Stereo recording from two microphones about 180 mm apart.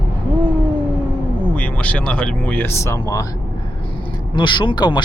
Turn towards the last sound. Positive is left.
turn(degrees=25)  # may be behind; listen again after turning